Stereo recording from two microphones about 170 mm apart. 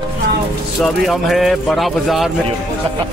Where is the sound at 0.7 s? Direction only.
Centre (ahead or behind).